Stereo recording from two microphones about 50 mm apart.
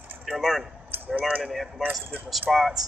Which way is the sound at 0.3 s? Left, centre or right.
Centre.